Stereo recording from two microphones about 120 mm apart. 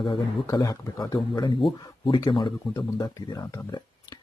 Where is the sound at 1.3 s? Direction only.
45° left (ahead or behind).